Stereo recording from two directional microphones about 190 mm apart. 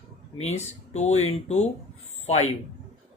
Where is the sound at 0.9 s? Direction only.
35° left (ahead or behind).